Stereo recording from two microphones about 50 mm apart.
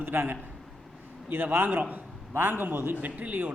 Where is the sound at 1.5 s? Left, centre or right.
Right.